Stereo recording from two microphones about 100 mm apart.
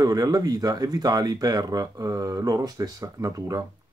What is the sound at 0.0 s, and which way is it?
Speech, 40° right (ahead or behind).